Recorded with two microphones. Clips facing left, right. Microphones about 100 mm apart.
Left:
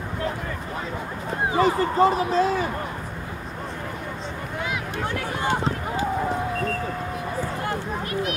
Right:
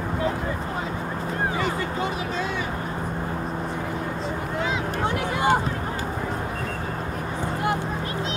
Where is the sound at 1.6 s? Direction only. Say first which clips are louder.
Left 7 dB; 35° left (ahead or behind).